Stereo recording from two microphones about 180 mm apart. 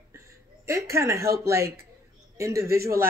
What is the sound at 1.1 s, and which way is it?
Speech, 60° right (ahead or behind).